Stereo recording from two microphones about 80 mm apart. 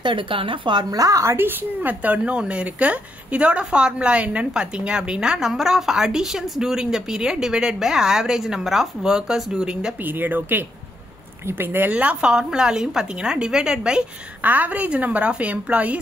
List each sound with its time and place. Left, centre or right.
0.0 s a woman's voice: right
0.8 s a woman's voice: right; by 9.9 s centre
9.9 s a woman's voice: right